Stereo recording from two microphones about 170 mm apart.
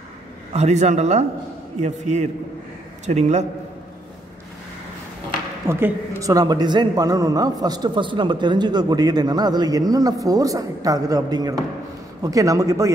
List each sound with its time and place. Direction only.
0.5 s speech: 40° right (ahead or behind)
5.7 s speech: 15° right (ahead or behind)